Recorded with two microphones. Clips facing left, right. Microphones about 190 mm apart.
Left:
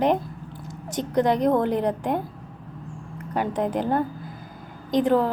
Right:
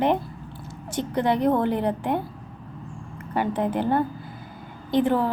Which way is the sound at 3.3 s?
40° left (ahead or behind).